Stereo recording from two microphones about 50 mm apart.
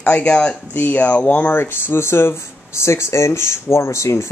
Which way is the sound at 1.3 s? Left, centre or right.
Left.